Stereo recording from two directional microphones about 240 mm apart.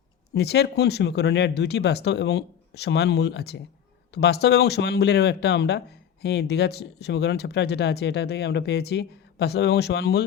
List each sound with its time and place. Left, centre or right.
0.3 s speech: left